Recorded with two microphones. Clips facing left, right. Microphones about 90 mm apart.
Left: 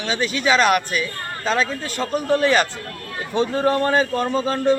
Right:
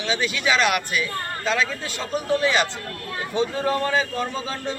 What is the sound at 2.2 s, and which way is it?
A man's voice, 50° left (ahead or behind).